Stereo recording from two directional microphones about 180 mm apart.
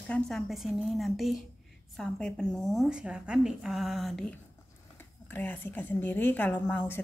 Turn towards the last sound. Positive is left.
turn(degrees=10)  # may be behind; listen again after turning